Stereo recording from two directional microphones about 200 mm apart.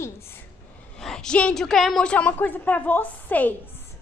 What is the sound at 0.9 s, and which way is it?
A woman's voice, 5° left (ahead or behind).